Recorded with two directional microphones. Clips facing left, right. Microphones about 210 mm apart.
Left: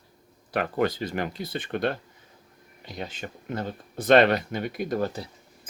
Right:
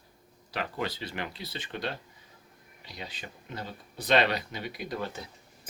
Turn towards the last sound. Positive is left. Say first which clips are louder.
# left 8 dB
turn(degrees=40)  # may be behind; listen again after turning